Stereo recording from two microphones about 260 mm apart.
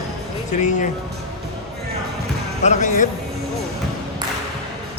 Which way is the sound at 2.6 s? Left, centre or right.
Left.